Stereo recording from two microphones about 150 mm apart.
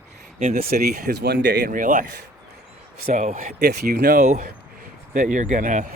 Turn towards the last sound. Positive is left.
turn(degrees=-55)  # may be behind; listen again after turning